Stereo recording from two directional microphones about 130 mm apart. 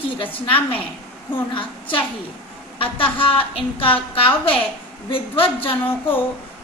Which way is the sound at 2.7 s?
45° left (ahead or behind).